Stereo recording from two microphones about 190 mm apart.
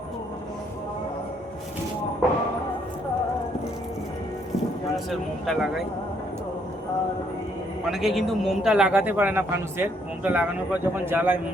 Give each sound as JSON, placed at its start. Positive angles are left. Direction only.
{"t": 5.5, "sound": "speech", "side_deg": 0}
{"t": 7.9, "sound": "a man's voice", "side_deg": 0}